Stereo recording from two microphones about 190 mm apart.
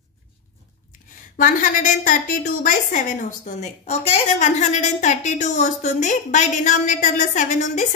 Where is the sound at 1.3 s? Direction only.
45° left (ahead or behind).